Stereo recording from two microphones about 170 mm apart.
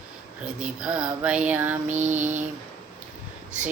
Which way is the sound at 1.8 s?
45° right (ahead or behind).